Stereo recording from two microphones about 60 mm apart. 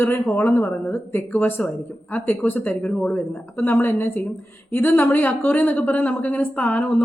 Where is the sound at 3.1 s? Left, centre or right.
Left.